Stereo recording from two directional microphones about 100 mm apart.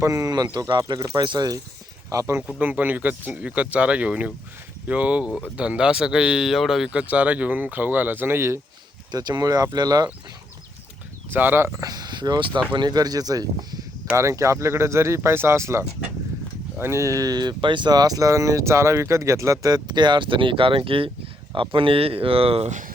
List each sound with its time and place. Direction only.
0.0 s speech: 35° right (ahead or behind)
2.0 s speech: 30° right (ahead or behind)
2.5 s speech: 15° right (ahead or behind)
9.1 s speech: 40° right (ahead or behind)
11.3 s speech: 20° right (ahead or behind); by 13.7 s 40° right (ahead or behind)
14.2 s speech: 30° right (ahead or behind)
16.8 s speech: 30° right (ahead or behind); by 22.7 s 75° right (ahead or behind)